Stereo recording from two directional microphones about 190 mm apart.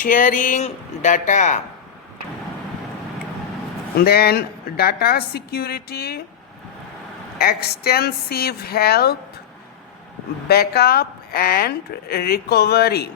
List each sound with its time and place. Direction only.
0.0 s speech: 45° left (ahead or behind)
3.9 s speech: 55° left (ahead or behind)
7.3 s speech: 55° left (ahead or behind)
10.5 s speech: 55° left (ahead or behind)